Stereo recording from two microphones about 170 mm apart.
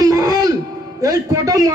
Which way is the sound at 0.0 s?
20° right (ahead or behind).